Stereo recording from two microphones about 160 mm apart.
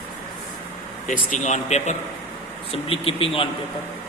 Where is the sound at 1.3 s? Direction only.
50° left (ahead or behind).